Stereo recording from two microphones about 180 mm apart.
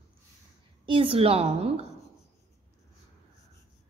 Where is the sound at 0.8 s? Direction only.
30° right (ahead or behind).